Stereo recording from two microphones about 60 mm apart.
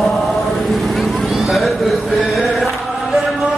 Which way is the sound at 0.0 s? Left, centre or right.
Centre.